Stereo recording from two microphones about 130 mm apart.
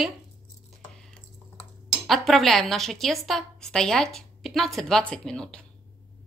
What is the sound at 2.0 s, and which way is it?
A woman's voice, centre (ahead or behind).